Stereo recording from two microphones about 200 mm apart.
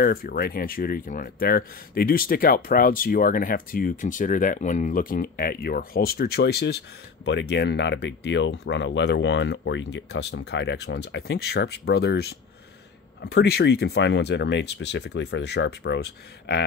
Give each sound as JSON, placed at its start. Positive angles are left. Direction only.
{"t": 0.0, "sound": "speech", "side_deg": 50}